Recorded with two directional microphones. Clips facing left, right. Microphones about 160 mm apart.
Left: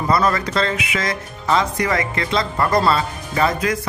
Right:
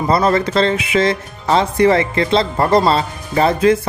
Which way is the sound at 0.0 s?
25° right (ahead or behind).